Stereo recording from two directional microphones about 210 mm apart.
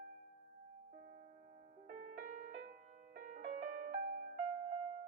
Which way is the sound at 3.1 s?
40° right (ahead or behind).